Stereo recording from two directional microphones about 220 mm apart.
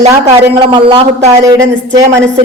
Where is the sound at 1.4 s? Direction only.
15° right (ahead or behind).